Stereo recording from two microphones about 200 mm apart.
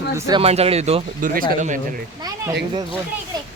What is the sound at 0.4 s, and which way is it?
Speech, 30° right (ahead or behind).